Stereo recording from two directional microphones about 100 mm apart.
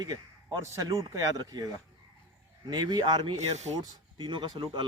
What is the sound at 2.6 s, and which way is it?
Speech, 45° right (ahead or behind).